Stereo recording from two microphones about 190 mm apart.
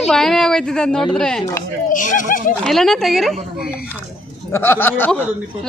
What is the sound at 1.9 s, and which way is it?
Speech, 45° left (ahead or behind).